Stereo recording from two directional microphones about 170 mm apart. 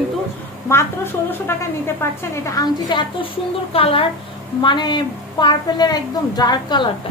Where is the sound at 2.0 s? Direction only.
20° left (ahead or behind).